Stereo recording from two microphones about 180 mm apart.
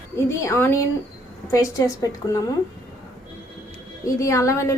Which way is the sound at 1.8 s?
20° left (ahead or behind).